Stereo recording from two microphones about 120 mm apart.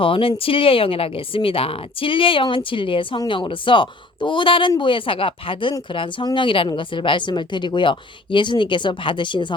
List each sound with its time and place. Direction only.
0.0 s a woman's voice: 50° left (ahead or behind)